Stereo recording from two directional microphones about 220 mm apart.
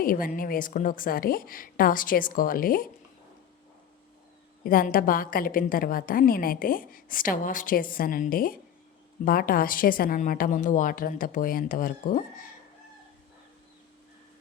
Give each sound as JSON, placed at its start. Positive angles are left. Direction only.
{"t": 0.0, "sound": "a woman's voice", "side_deg": 40}
{"t": 4.6, "sound": "a woman's voice", "side_deg": 40}